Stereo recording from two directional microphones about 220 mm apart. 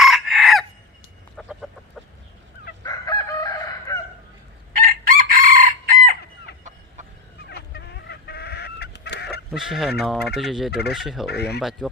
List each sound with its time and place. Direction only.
0.0 s chicken: centre (ahead or behind)
2.8 s chicken: 15° left (ahead or behind)
4.7 s chicken: 40° right (ahead or behind)
7.5 s chicken: 50° left (ahead or behind)
9.5 s turkey: centre (ahead or behind)
10.7 s speech: 45° left (ahead or behind)
10.9 s turkey: centre (ahead or behind)
11.3 s speech: 50° left (ahead or behind)